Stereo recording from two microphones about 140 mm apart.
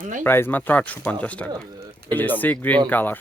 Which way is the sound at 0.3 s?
15° left (ahead or behind).